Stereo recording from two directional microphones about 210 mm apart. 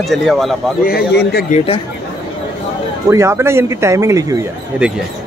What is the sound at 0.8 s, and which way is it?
Speech, 50° left (ahead or behind).